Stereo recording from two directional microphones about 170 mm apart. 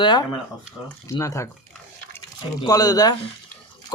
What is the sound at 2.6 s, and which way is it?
Speech, 20° left (ahead or behind).